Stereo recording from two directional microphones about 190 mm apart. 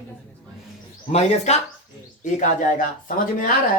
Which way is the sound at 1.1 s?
35° left (ahead or behind).